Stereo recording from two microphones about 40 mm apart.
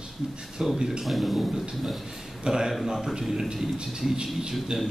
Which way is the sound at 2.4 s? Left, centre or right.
Centre.